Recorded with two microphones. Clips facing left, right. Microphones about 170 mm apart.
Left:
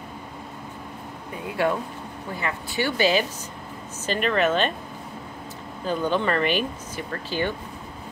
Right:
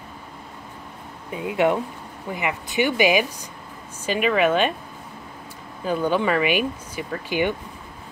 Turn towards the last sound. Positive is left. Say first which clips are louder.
# right 3 dB
turn(degrees=-15)  # may be behind; listen again after turning